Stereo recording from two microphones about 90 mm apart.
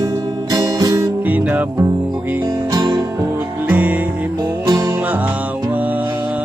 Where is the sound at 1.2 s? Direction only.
20° right (ahead or behind).